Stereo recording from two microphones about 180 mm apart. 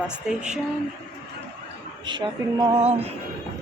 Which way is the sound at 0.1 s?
5° right (ahead or behind).